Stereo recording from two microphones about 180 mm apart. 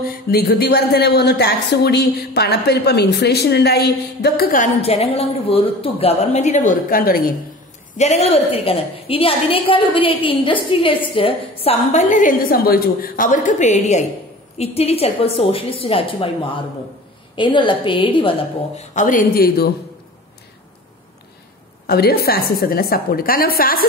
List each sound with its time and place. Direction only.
0.1 s a woman's voice: 60° left (ahead or behind)
4.8 s a woman's voice: 35° left (ahead or behind); by 7.2 s 55° left (ahead or behind)
8.0 s a woman's voice: 35° left (ahead or behind)
18.8 s speech: 45° left (ahead or behind)
21.8 s a woman's voice: 60° left (ahead or behind)